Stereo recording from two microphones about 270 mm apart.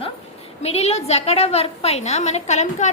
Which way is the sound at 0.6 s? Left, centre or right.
Left.